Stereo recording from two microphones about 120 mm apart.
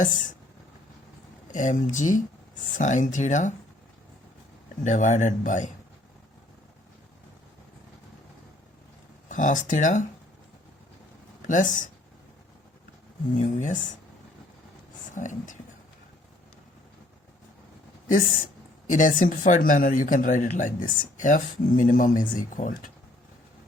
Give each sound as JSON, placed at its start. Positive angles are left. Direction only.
{"t": 1.5, "sound": "speech", "side_deg": 90}
{"t": 4.8, "sound": "speech", "side_deg": 90}
{"t": 9.3, "sound": "speech", "side_deg": 90}
{"t": 11.4, "sound": "speech", "side_deg": 90}
{"t": 13.3, "sound": "speech", "side_deg": 90}
{"t": 15.1, "sound": "speech", "side_deg": 90}
{"t": 18.9, "sound": "speech", "side_deg": 90}